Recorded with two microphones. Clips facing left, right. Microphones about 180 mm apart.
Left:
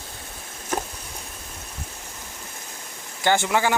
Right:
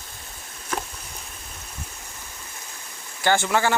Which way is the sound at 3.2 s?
20° left (ahead or behind).